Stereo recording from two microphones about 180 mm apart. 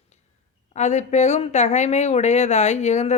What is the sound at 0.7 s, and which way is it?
A woman's voice, 40° left (ahead or behind).